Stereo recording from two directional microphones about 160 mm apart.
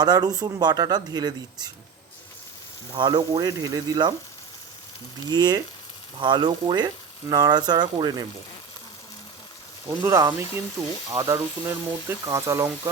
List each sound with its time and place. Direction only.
0.0 s speech: 25° right (ahead or behind)
2.9 s speech: 30° right (ahead or behind)
5.3 s speech: 25° right (ahead or behind)
10.0 s speech: 20° right (ahead or behind)